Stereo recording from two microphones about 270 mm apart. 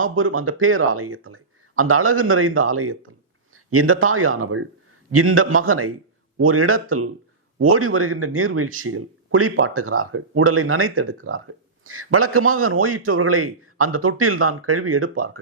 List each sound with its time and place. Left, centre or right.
0.0 s speech: right